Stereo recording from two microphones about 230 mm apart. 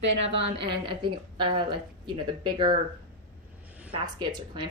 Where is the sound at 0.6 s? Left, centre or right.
Right.